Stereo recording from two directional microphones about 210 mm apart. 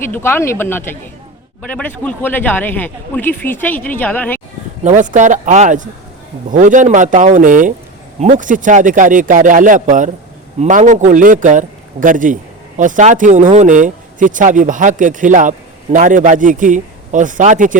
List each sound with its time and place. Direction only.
0.1 s speech: 10° left (ahead or behind)
4.8 s a man's voice: 35° right (ahead or behind)